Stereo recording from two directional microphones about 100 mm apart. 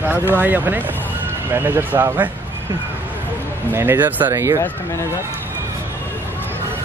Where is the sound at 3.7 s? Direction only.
20° right (ahead or behind).